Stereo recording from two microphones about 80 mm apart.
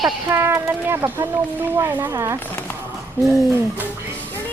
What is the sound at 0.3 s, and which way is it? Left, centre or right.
Speech, right.